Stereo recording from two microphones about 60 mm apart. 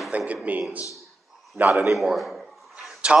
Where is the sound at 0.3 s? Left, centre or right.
Right.